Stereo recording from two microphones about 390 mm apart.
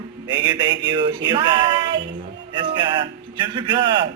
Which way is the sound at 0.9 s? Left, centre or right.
Centre.